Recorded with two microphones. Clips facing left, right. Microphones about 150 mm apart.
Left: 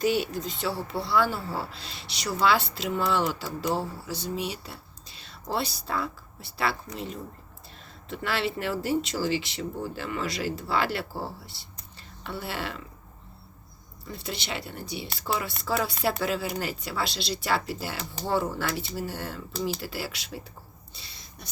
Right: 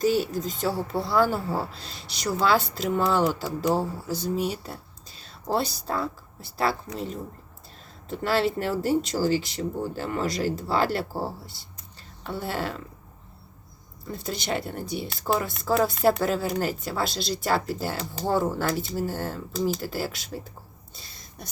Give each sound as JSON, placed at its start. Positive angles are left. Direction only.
{"t": 0.0, "sound": "speech", "side_deg": -40}
{"t": 14.1, "sound": "speech", "side_deg": -45}
{"t": 20.9, "sound": "a sound", "side_deg": -50}